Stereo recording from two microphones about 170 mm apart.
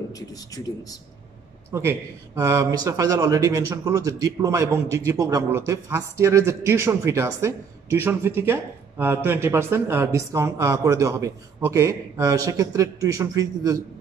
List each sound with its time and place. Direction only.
0.1 s speech: 20° left (ahead or behind)
1.7 s speech: 15° right (ahead or behind)